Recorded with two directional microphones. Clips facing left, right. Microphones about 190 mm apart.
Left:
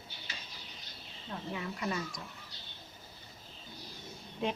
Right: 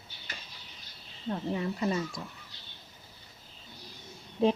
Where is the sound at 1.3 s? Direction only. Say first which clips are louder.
Right 8 dB; 35° right (ahead or behind).